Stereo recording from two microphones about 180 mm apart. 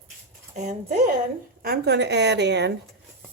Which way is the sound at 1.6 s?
60° right (ahead or behind).